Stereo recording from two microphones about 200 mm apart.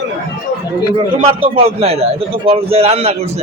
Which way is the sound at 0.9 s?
25° right (ahead or behind).